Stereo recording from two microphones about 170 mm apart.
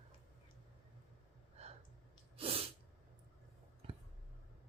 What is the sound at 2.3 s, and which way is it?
Sneeze, 35° right (ahead or behind).